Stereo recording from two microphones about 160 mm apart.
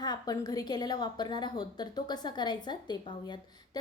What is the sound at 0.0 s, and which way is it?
A woman's voice, 25° left (ahead or behind).